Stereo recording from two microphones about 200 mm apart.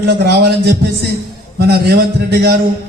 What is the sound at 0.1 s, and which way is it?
A man's voice, 55° right (ahead or behind).